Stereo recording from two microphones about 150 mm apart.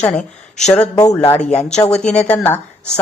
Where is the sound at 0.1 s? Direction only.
50° left (ahead or behind).